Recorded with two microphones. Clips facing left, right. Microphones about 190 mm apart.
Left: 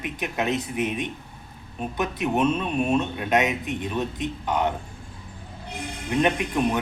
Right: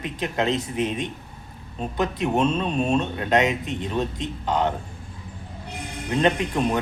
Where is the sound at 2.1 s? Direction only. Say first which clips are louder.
Even; 20° left (ahead or behind).